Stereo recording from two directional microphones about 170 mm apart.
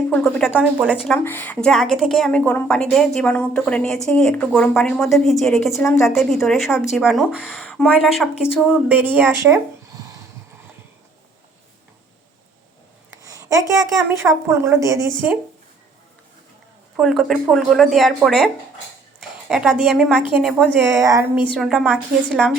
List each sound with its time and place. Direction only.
0.1 s a woman's voice: 5° left (ahead or behind); by 9.6 s 15° right (ahead or behind)
13.2 s a woman's voice: 20° right (ahead or behind)
17.0 s a woman's voice: centre (ahead or behind)
20.8 s a woman's voice: 20° right (ahead or behind)
21.5 s a woman's voice: 5° right (ahead or behind)